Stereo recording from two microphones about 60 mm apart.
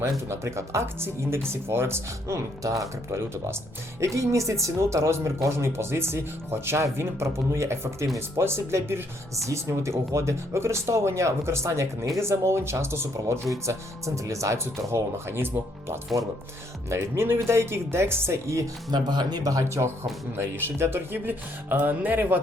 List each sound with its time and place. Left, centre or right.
0.3 s speech: right
3.1 s speech: right
4.0 s speech: right
12.2 s speech: right
13.7 s speech: right
16.9 s speech: right
19.5 s speech: right
20.3 s speech: right
21.1 s speech: right